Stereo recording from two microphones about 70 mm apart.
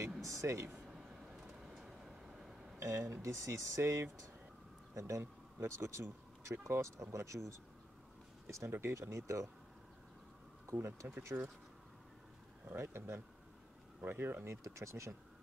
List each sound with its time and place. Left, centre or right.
0.2 s speech: right
0.8 s train: centre
2.8 s speech: right
10.7 s speech: right
12.7 s speech: right